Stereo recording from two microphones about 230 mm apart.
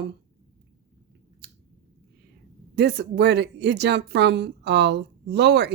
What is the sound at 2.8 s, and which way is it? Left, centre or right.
A woman's voice, right.